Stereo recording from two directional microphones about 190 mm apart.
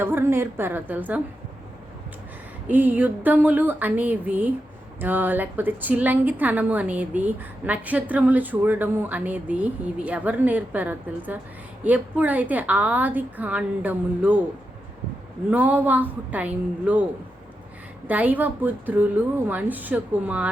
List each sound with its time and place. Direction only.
0.0 s a woman's voice: 10° right (ahead or behind)
2.6 s a woman's voice: 10° right (ahead or behind)
15.4 s a woman's voice: 10° right (ahead or behind)
18.1 s a woman's voice: 10° right (ahead or behind)